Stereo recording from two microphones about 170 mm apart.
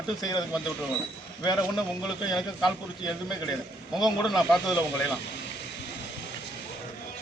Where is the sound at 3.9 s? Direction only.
Centre (ahead or behind).